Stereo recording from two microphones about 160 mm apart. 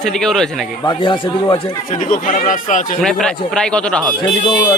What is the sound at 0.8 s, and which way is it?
Speech, 30° left (ahead or behind).